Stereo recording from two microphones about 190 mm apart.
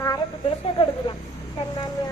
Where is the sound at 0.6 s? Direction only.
25° left (ahead or behind).